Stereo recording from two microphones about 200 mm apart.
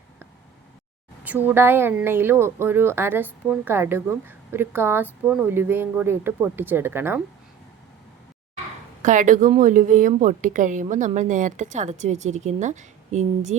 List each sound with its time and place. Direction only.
1.2 s speech: 10° right (ahead or behind)
9.0 s a woman's voice: 40° right (ahead or behind)